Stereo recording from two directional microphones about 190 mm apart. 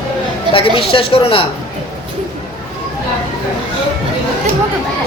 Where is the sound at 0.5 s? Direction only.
30° left (ahead or behind).